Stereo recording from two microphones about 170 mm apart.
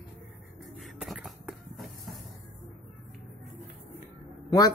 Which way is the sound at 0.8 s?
Centre (ahead or behind).